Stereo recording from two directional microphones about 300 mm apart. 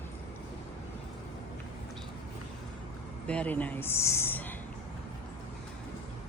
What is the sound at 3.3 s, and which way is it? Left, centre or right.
Speech, centre.